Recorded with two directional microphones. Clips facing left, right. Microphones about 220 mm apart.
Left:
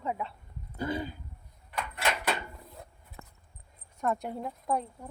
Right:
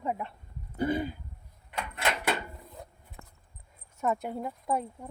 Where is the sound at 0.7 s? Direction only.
20° right (ahead or behind).